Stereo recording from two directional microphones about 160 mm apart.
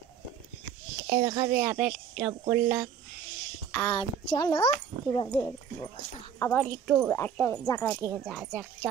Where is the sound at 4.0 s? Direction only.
30° left (ahead or behind).